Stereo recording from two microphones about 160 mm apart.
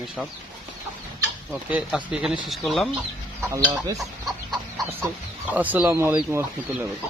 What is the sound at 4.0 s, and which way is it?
Chicken, centre (ahead or behind).